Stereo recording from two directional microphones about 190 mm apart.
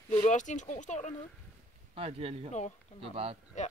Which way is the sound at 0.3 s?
40° left (ahead or behind).